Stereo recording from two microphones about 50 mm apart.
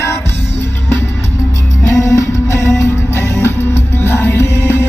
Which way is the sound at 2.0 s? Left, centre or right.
Left.